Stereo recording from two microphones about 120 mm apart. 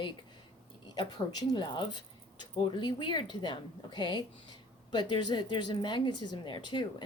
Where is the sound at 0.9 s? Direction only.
35° left (ahead or behind).